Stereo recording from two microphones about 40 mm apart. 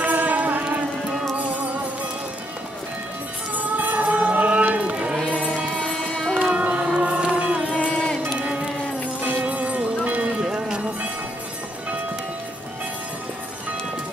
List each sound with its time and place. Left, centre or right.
0.0 s music: right
3.5 s music: right
4.9 s music: right
5.8 s music: left
6.4 s music: right
7.7 s music: left
8.4 s music: right
9.2 s music: right
10.2 s run: centre